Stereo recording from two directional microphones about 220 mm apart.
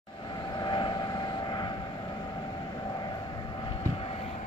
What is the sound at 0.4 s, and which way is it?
Vehicle, 20° left (ahead or behind).